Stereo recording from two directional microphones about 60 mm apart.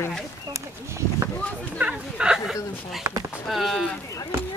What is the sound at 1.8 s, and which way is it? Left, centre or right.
Speech, centre.